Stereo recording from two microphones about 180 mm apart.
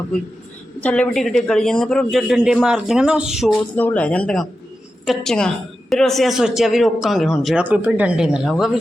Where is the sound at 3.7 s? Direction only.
10° left (ahead or behind).